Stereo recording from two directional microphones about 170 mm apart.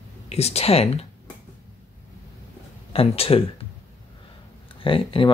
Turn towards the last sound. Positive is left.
turn(degrees=30)  # may be behind; listen again after turning